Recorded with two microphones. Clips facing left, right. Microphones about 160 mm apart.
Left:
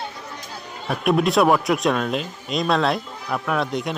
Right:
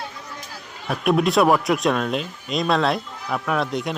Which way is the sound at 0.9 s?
Centre (ahead or behind).